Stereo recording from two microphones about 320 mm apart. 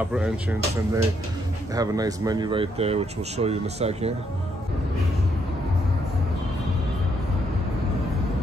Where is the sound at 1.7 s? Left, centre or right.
Centre.